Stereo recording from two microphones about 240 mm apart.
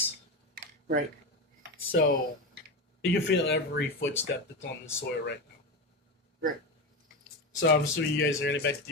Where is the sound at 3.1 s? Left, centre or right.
Left.